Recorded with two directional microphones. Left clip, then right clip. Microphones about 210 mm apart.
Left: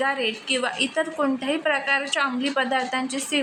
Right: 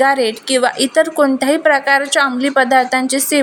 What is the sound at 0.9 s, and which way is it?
A woman's voice, 30° right (ahead or behind).